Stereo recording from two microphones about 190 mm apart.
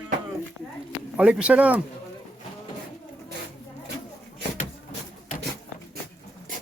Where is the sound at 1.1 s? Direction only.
5° right (ahead or behind).